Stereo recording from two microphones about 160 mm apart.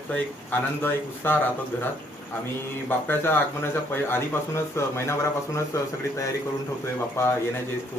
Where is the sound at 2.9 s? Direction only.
15° left (ahead or behind).